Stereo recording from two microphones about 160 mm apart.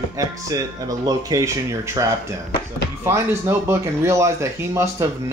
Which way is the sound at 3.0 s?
15° right (ahead or behind).